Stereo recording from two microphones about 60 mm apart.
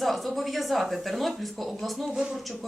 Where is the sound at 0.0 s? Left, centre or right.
Centre.